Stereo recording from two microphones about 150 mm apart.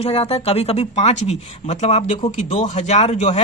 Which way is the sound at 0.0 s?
45° left (ahead or behind).